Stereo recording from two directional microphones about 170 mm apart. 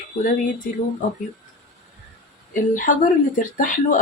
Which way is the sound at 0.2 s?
50° left (ahead or behind).